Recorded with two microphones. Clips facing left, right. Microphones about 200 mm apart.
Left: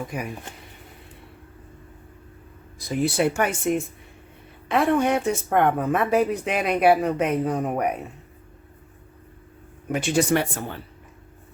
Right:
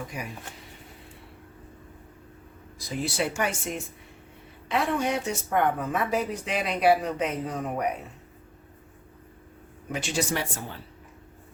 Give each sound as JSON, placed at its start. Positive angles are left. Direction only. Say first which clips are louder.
{"t": 0.1, "sound": "speech", "louder": "left 6 dB", "side_deg": 55}
{"t": 2.7, "sound": "speech", "louder": "left 7 dB", "side_deg": 55}
{"t": 9.9, "sound": "speech", "louder": "left 8 dB", "side_deg": 55}